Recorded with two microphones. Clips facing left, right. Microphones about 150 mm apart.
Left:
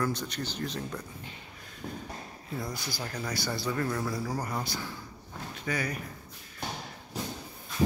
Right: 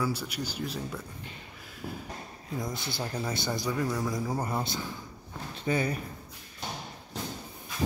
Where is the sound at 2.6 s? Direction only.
25° right (ahead or behind).